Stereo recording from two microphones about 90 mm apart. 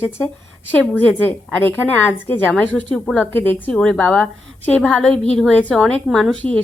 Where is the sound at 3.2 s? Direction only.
20° left (ahead or behind).